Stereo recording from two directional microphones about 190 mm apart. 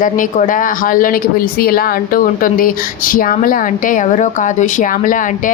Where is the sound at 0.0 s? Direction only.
45° left (ahead or behind).